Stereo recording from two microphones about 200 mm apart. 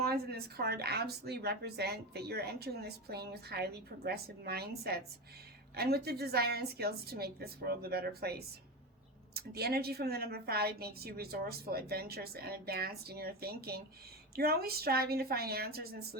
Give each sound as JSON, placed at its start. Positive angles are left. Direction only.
{"t": 0.0, "sound": "a woman's voice", "side_deg": -50}